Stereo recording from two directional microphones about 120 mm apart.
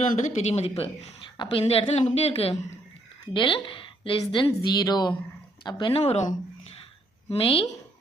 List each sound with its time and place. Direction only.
0.2 s speech: 70° left (ahead or behind)
0.8 s a woman's voice: 45° left (ahead or behind)
3.3 s speech: 45° left (ahead or behind); by 6.7 s 65° left (ahead or behind)
7.3 s a woman's voice: 50° left (ahead or behind)